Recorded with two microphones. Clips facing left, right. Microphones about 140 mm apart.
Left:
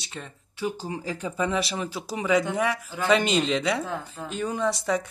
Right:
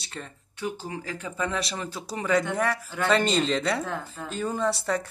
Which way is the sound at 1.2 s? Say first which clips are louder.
Left 4 dB; 15° left (ahead or behind).